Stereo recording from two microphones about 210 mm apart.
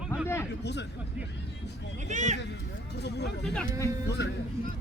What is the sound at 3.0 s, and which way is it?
A man's voice, 50° left (ahead or behind).